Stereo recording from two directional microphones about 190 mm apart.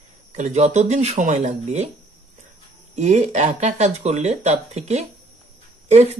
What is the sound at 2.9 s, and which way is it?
Speech, 35° right (ahead or behind).